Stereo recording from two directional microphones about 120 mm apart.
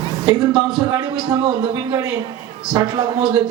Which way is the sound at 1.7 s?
30° right (ahead or behind).